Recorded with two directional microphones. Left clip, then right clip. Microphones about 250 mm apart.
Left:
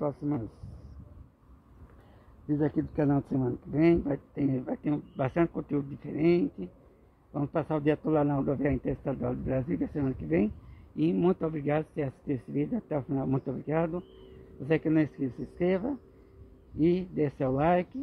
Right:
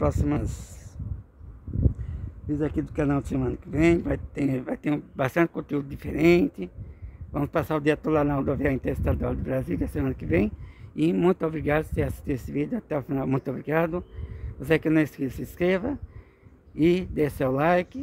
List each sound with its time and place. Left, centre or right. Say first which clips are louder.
0.0 s speech: right 6 dB; right
2.5 s speech: right 2 dB; centre